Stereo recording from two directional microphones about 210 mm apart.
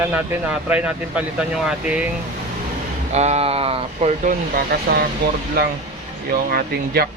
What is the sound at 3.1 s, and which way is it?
Speech, 30° right (ahead or behind).